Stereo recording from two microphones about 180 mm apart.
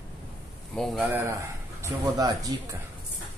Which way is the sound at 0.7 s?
Centre (ahead or behind).